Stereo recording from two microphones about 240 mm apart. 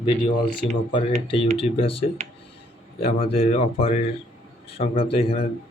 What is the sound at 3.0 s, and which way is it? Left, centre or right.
Speech, left.